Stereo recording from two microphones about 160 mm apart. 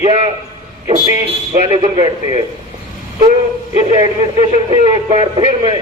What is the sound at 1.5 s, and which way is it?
Speech, 35° right (ahead or behind).